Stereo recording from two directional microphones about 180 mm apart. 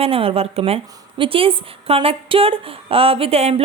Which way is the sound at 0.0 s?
30° right (ahead or behind).